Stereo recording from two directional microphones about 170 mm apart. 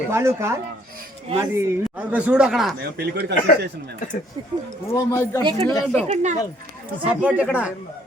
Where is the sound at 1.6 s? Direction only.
10° right (ahead or behind).